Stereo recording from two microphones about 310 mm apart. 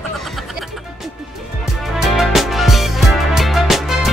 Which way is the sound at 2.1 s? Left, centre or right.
Centre.